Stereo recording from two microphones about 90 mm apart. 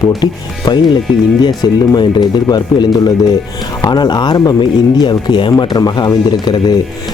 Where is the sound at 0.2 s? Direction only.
55° left (ahead or behind).